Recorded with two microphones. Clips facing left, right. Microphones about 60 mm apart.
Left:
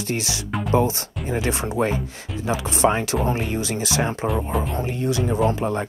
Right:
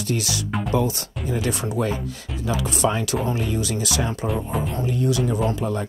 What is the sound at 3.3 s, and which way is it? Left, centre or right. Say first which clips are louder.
Speech: left 1 dB; left.